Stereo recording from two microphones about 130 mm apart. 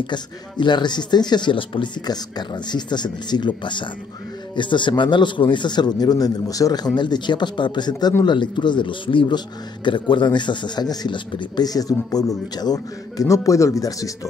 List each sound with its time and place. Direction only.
0.0 s a man's voice: 35° left (ahead or behind)